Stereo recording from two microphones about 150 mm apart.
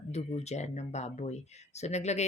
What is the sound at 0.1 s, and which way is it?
Speech, 45° left (ahead or behind).